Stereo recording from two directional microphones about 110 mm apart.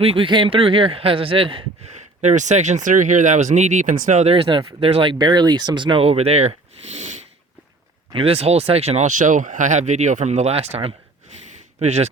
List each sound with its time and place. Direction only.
0.0 s a man's voice: 60° right (ahead or behind)
1.9 s speech: 90° right; by 5.1 s 55° right (ahead or behind)
5.1 s speech: 40° right (ahead or behind); by 6.5 s 75° right (ahead or behind)
6.8 s a sound: 90° right
8.1 s speech: 60° right (ahead or behind)
9.6 s speech: 90° right; by 10.9 s 65° right (ahead or behind)
11.8 s speech: 90° right